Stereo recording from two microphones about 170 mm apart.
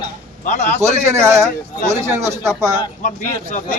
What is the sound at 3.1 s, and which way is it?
Speech, 50° left (ahead or behind).